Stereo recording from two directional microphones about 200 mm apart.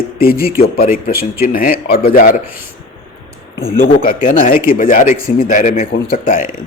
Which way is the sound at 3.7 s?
45° left (ahead or behind).